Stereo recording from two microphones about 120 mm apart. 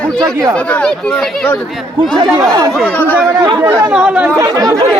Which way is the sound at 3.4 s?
40° right (ahead or behind).